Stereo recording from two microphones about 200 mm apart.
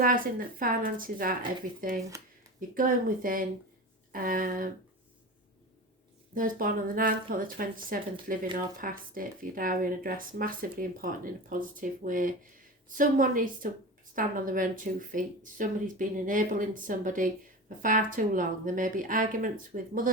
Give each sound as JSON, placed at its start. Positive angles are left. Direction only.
{"t": 0.0, "sound": "speech", "side_deg": -45}
{"t": 6.3, "sound": "speech", "side_deg": -45}